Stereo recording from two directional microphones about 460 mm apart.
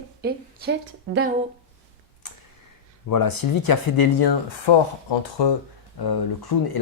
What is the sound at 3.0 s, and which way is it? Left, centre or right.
Speech, left.